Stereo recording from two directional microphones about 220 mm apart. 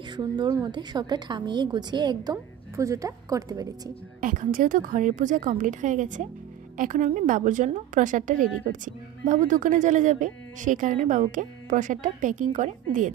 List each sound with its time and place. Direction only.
0.1 s a woman's voice: 20° right (ahead or behind)
4.2 s a woman's voice: 35° right (ahead or behind)